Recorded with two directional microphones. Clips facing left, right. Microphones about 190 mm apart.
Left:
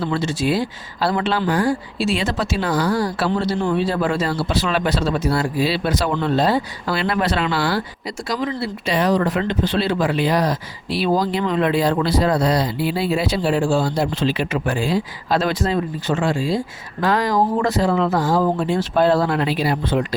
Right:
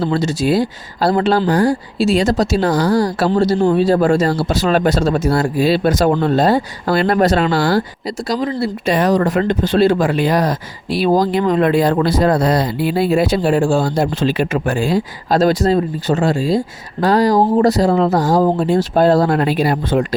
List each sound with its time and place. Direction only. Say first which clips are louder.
0.0 s speech: right 4 dB; 40° right (ahead or behind)